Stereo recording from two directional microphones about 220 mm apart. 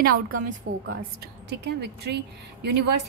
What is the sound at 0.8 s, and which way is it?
A woman's voice, 50° right (ahead or behind).